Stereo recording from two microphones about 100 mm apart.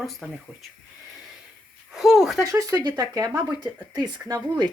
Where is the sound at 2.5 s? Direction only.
35° right (ahead or behind).